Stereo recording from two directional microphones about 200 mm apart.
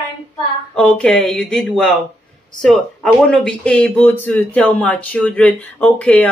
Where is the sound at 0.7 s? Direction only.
5° left (ahead or behind).